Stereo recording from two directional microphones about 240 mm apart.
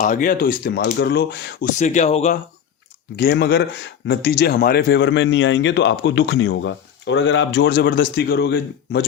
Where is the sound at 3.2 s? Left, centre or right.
Left.